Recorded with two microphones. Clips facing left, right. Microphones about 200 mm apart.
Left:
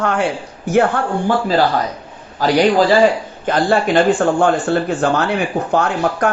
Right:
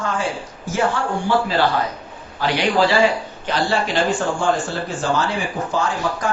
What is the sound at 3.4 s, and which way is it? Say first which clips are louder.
Speech: left 6 dB; 50° left (ahead or behind).